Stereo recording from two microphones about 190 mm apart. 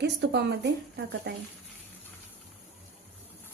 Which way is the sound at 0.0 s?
65° right (ahead or behind).